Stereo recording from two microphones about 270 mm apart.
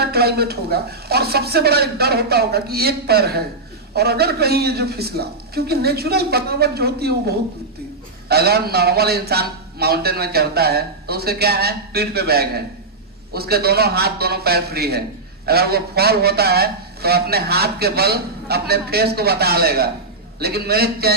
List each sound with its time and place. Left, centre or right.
0.0 s a man's voice: right